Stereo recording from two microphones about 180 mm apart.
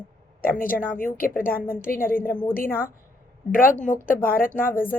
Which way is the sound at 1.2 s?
50° left (ahead or behind).